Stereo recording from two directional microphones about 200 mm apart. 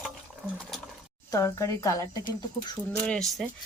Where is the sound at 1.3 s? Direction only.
15° left (ahead or behind).